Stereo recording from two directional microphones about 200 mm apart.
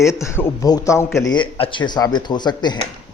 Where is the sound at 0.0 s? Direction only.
15° left (ahead or behind).